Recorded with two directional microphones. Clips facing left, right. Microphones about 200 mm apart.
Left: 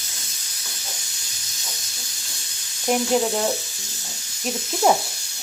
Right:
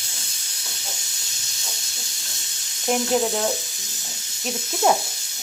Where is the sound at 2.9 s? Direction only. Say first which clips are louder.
Left 1 dB; centre (ahead or behind).